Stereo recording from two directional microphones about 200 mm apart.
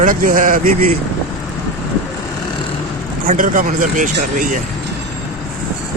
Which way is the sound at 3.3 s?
40° right (ahead or behind).